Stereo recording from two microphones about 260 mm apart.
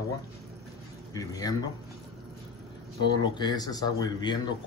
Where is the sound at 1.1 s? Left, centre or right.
Centre.